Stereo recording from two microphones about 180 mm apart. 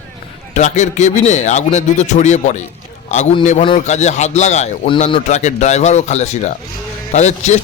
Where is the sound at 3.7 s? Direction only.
40° left (ahead or behind).